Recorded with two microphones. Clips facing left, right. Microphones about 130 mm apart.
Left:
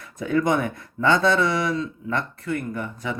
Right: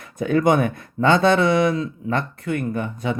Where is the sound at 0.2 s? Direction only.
55° right (ahead or behind).